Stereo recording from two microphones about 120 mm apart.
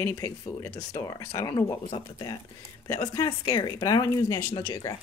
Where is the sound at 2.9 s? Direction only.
30° left (ahead or behind).